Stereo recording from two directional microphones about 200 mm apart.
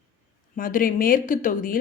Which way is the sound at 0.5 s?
45° left (ahead or behind).